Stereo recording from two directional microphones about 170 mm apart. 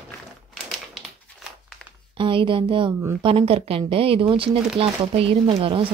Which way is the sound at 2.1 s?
30° right (ahead or behind).